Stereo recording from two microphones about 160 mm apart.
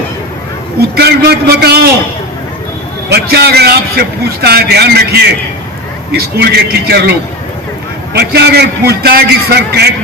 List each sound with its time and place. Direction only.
0.8 s a man's voice: 90° right
3.1 s a man's voice: 90° right